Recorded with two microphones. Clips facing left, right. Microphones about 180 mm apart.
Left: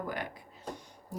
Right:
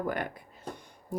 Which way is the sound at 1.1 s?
55° right (ahead or behind).